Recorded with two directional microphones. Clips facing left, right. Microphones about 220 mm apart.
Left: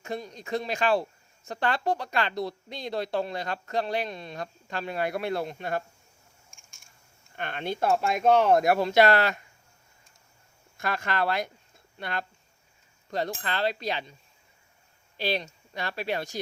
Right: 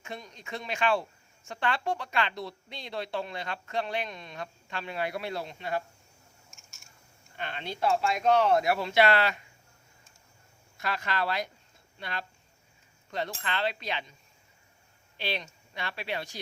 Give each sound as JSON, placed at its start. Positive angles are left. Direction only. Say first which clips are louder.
{"t": 0.0, "sound": "a woman's voice", "louder": "left 7 dB", "side_deg": 40}
{"t": 6.5, "sound": "scissors", "louder": "right 2 dB", "side_deg": -5}
{"t": 7.3, "sound": "speech", "louder": "left 5 dB", "side_deg": 50}
{"t": 10.8, "sound": "speech", "louder": "left 3 dB", "side_deg": 50}
{"t": 13.1, "sound": "a woman's voice", "louder": "left 4 dB", "side_deg": 40}
{"t": 15.2, "sound": "a woman's voice", "louder": "left 5 dB", "side_deg": 40}